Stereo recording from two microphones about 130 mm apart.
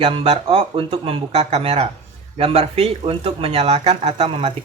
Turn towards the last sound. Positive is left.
turn(degrees=-50)  # may be behind; listen again after turning